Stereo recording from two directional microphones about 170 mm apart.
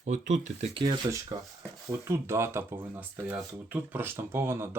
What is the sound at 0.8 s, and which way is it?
Speech, 25° right (ahead or behind).